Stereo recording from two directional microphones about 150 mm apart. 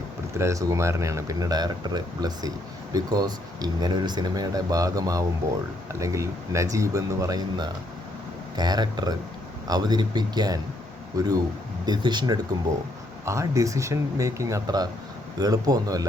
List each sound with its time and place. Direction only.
0.3 s speech: 20° right (ahead or behind)